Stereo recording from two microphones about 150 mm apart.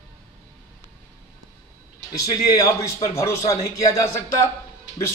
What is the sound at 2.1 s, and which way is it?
Speech, 25° left (ahead or behind).